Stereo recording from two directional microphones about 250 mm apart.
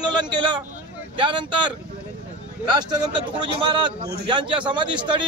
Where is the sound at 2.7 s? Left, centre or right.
Centre.